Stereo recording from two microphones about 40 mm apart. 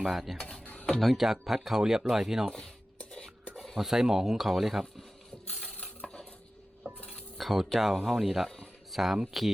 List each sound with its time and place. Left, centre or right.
0.1 s speech: centre
0.3 s speech: centre
0.6 s mechanisms: left
1.1 s speech: centre
3.0 s a sound: left
3.8 s speech: centre
5.5 s stir: left
7.3 s speech: centre